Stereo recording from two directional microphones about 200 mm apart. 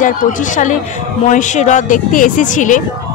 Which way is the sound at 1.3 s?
35° left (ahead or behind).